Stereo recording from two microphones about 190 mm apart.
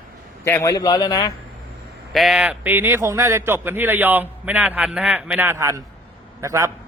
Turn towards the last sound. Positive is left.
turn(degrees=-15)  # may be behind; listen again after turning